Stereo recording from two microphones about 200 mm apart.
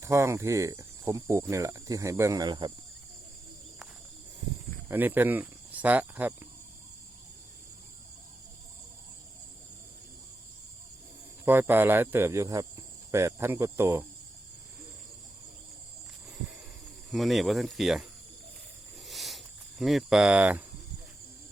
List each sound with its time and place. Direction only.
0.0 s speech: 15° right (ahead or behind)
4.9 s speech: 10° right (ahead or behind)
11.4 s speech: 10° right (ahead or behind)
16.2 s a sound: 5° right (ahead or behind)
17.1 s speech: centre (ahead or behind)
19.0 s a sound: centre (ahead or behind)
19.8 s speech: centre (ahead or behind)